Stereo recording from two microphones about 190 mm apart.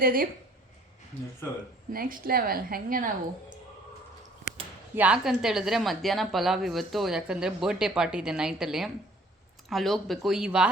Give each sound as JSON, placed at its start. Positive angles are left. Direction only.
{"t": 0.0, "sound": "a woman's voice", "side_deg": -50}
{"t": 1.9, "sound": "a woman's voice", "side_deg": -50}
{"t": 4.9, "sound": "a woman's voice", "side_deg": -5}